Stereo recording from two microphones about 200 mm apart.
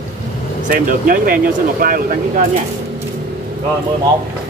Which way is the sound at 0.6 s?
45° right (ahead or behind).